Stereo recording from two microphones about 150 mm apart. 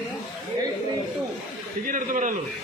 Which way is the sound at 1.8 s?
60° right (ahead or behind).